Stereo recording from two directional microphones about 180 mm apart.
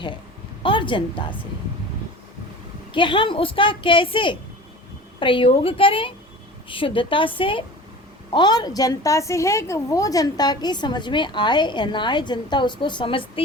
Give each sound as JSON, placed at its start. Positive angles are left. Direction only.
{"t": 0.6, "sound": "a woman's voice", "side_deg": 25}
{"t": 2.9, "sound": "a woman's voice", "side_deg": 25}